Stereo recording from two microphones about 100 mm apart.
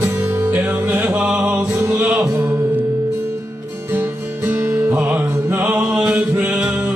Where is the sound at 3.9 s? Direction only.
25° right (ahead or behind).